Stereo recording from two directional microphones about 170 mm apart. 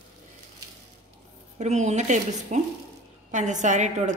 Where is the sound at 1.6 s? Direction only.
40° right (ahead or behind).